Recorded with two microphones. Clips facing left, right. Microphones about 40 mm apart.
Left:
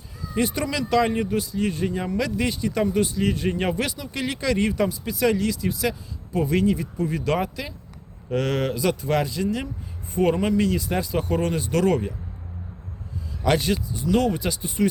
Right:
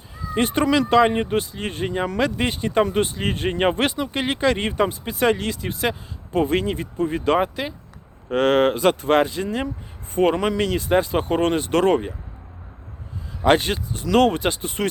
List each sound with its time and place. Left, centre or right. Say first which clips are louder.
0.3 s speech: right 5 dB; right
13.4 s speech: right 4 dB; right
13.9 s speech: right 6 dB; right
14.3 s speech: right 4 dB; right